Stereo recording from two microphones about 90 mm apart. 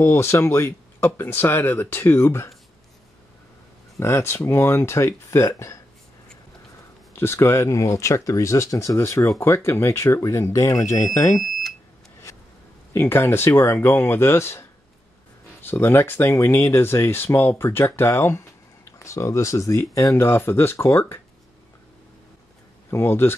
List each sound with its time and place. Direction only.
0.0 s speech: 30° left (ahead or behind)
4.0 s speech: 30° left (ahead or behind)
7.2 s speech: 30° left (ahead or behind)
12.9 s speech: 25° left (ahead or behind)
22.8 s speech: 25° left (ahead or behind)